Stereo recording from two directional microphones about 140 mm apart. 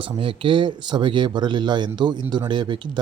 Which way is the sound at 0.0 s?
40° right (ahead or behind).